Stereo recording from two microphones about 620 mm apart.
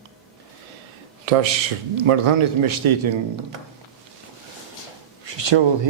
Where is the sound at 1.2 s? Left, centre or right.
Right.